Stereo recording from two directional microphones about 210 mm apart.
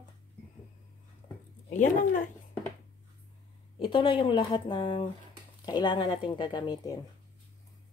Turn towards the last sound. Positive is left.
turn(degrees=20)  # may be behind; listen again after turning